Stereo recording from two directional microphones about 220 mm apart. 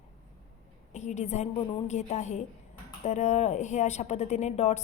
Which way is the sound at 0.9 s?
30° left (ahead or behind).